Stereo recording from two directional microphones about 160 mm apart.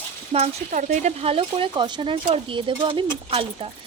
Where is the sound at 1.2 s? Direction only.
35° right (ahead or behind).